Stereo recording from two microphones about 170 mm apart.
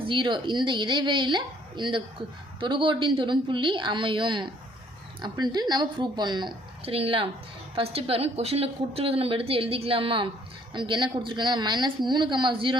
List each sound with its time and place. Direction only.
0.0 s a woman's voice: 30° right (ahead or behind)